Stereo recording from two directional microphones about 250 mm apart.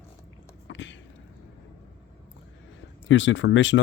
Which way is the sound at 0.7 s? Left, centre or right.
Left.